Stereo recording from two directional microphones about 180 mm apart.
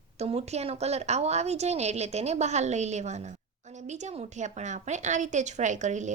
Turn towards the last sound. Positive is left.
turn(degrees=-40)  # may be behind; listen again after turning